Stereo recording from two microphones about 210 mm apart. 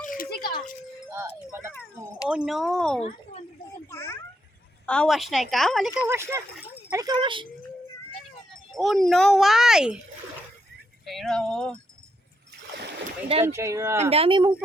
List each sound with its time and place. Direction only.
0.0 s music: 40° left (ahead or behind)
1.1 s a woman's voice: 15° right (ahead or behind); by 3.0 s centre (ahead or behind)
3.9 s a sound: 10° left (ahead or behind)
4.9 s a woman's voice: centre (ahead or behind); by 7.4 s 25° right (ahead or behind)
8.7 s a woman's voice: centre (ahead or behind)
11.0 s a woman's voice: centre (ahead or behind)
13.4 s speech: 15° right (ahead or behind)
14.1 s speech: 25° right (ahead or behind)